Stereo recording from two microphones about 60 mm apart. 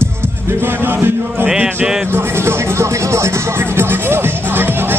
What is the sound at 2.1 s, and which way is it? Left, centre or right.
Music, right.